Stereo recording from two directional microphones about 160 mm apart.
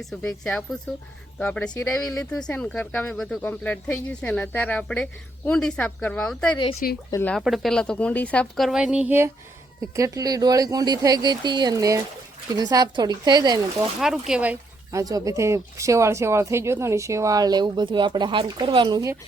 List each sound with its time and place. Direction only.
0.0 s a woman's voice: centre (ahead or behind)
7.3 s a woman's voice: centre (ahead or behind); by 13.6 s 25° right (ahead or behind)
14.0 s speech: 5° right (ahead or behind)
15.0 s speech: 20° right (ahead or behind)